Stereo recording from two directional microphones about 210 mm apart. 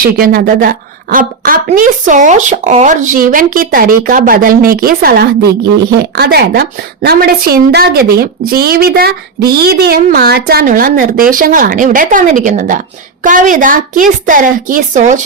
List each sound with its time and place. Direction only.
0.2 s a woman's voice: 45° right (ahead or behind)